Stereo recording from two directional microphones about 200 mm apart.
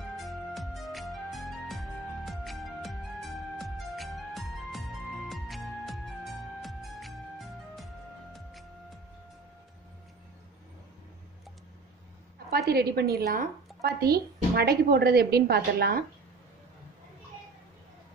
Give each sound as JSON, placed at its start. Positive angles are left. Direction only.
{"t": 0.2, "sound": "music", "side_deg": 0}
{"t": 8.3, "sound": "music", "side_deg": 0}
{"t": 12.4, "sound": "a woman's voice", "side_deg": -50}